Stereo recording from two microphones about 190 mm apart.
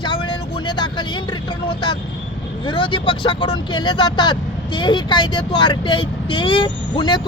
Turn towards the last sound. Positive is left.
turn(degrees=25)  # may be behind; listen again after turning